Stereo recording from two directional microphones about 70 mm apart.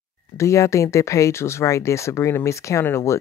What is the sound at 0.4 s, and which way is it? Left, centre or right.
A woman's voice, left.